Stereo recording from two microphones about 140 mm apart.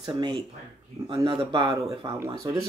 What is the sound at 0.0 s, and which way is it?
Speech, 30° right (ahead or behind).